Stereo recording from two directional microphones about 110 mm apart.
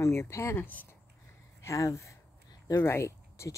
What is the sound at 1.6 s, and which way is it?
Speech, 30° left (ahead or behind).